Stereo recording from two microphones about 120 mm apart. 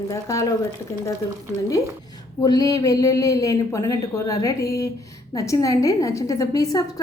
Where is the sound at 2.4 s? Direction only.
30° left (ahead or behind).